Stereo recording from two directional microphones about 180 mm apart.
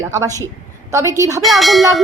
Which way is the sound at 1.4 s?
Centre (ahead or behind).